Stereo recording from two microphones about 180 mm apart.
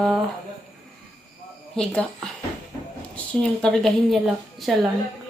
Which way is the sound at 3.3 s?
5° left (ahead or behind).